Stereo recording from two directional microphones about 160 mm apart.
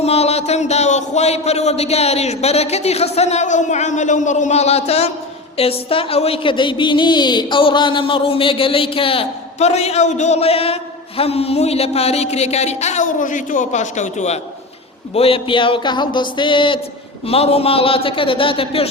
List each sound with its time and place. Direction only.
0.0 s a woman's voice: 40° left (ahead or behind)
15.1 s a woman's voice: 35° left (ahead or behind)